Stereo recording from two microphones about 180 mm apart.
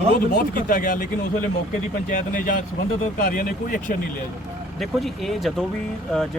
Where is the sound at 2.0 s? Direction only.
50° left (ahead or behind).